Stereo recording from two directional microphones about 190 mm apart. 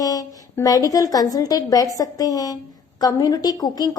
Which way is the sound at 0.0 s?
20° left (ahead or behind).